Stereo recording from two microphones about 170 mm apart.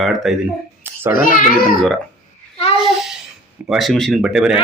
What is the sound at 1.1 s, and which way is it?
Speech, 55° left (ahead or behind).